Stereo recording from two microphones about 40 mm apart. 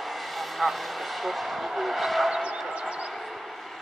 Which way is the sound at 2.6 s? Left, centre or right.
Right.